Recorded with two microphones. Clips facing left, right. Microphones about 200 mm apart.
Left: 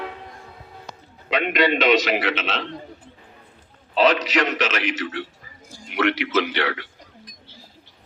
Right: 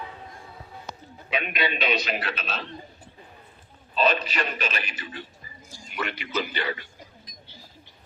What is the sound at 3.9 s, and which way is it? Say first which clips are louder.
A man's voice: left 6 dB; 85° left.